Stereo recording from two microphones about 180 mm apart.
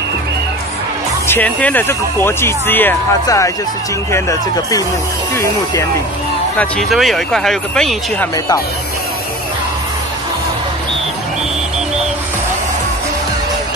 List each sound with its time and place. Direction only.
1.2 s speech: 10° left (ahead or behind)
6.6 s speech: centre (ahead or behind)